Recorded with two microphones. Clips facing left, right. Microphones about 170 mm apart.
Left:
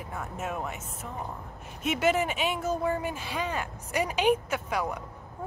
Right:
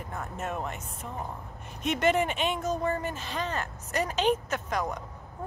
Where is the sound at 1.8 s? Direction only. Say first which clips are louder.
Even; 5° left (ahead or behind).